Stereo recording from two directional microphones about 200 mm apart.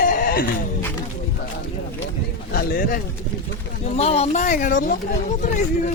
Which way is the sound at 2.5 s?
45° left (ahead or behind).